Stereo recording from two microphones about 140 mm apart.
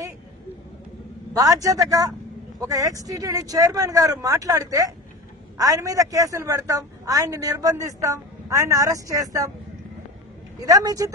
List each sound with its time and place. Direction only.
1.3 s a woman's voice: 25° right (ahead or behind)
10.6 s a woman's voice: 25° right (ahead or behind)